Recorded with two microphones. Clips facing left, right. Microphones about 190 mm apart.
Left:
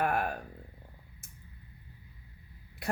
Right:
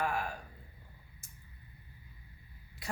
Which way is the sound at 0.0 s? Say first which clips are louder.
Left 5 dB; 60° left (ahead or behind).